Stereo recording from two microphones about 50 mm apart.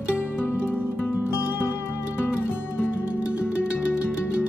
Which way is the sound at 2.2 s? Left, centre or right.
Left.